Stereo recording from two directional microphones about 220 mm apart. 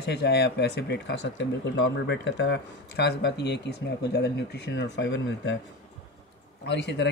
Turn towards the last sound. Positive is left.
turn(degrees=50)  # may be behind; listen again after turning